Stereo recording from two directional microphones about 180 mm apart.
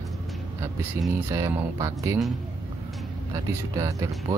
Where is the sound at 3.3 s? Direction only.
20° right (ahead or behind).